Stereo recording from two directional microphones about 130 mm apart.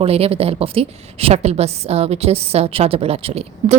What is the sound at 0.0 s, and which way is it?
A woman's voice, 50° right (ahead or behind).